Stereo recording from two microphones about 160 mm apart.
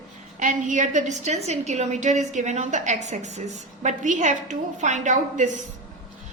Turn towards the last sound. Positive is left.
turn(degrees=-50)  # may be behind; listen again after turning